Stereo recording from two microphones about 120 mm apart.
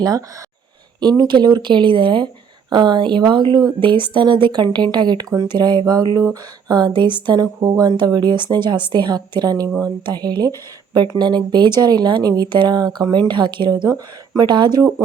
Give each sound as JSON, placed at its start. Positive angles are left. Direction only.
{"t": 0.0, "sound": "speech", "side_deg": -30}